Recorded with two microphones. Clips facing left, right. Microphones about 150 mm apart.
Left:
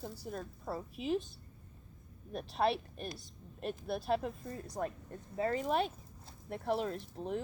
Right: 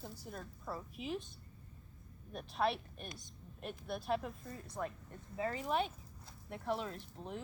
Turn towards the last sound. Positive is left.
turn(degrees=35)  # may be behind; listen again after turning